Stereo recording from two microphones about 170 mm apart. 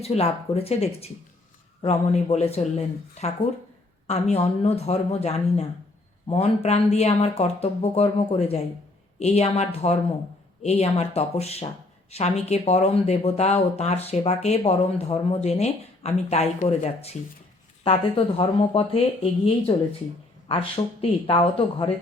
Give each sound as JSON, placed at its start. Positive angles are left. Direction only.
{"t": 0.0, "sound": "speech", "side_deg": 35}
{"t": 18.3, "sound": "speech", "side_deg": 35}